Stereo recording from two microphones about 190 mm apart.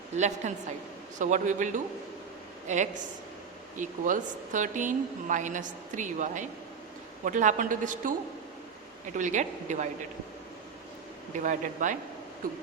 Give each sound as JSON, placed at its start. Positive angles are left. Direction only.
{"t": 0.2, "sound": "a woman's voice", "side_deg": -35}
{"t": 9.1, "sound": "a woman's voice", "side_deg": -40}
{"t": 11.4, "sound": "a woman's voice", "side_deg": -40}